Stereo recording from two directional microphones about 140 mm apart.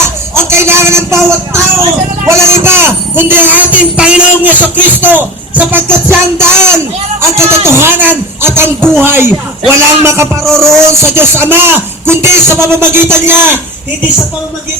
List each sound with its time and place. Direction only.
0.3 s a man's voice: 20° right (ahead or behind)
10.4 s speech: 5° left (ahead or behind)
11.0 s speech: 15° right (ahead or behind)